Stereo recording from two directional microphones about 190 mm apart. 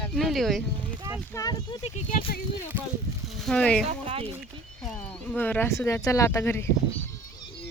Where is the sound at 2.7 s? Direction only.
10° right (ahead or behind).